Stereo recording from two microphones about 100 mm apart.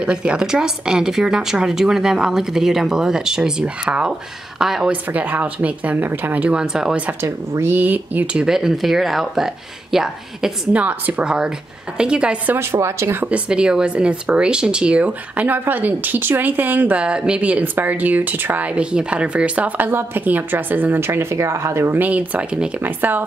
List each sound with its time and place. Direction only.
0.0 s a woman's voice: 10° right (ahead or behind)
5.1 s speech: 15° right (ahead or behind)
7.1 s speech: 25° right (ahead or behind); by 10.8 s 5° right (ahead or behind)
10.8 s speech: 15° right (ahead or behind)
12.5 s a woman's voice: 25° right (ahead or behind)
13.3 s speech: 10° right (ahead or behind)